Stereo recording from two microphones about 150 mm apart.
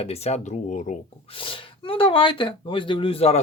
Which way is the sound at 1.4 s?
35° left (ahead or behind).